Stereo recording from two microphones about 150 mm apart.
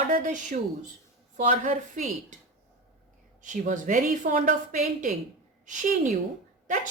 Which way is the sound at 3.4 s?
60° right (ahead or behind).